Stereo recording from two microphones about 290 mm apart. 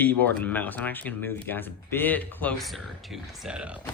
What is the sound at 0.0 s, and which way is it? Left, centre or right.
Speech, centre.